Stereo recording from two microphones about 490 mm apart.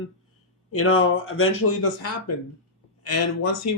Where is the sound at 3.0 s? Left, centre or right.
Left.